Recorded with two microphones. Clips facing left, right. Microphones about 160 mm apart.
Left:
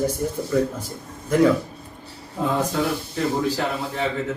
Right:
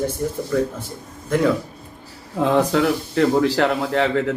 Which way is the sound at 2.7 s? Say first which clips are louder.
Right 5 dB; 75° right (ahead or behind).